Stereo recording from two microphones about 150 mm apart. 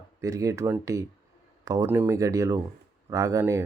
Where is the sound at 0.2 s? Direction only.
20° right (ahead or behind).